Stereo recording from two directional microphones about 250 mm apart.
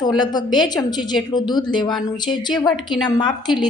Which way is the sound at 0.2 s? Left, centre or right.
Centre.